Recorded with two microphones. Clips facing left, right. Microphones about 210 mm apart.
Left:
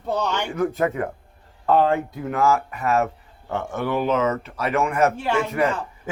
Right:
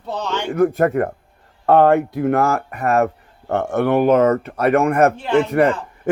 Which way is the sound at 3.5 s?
70° right (ahead or behind).